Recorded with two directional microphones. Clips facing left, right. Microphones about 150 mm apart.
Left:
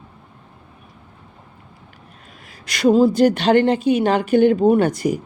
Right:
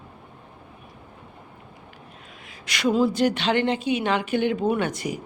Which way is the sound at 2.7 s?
35° left (ahead or behind).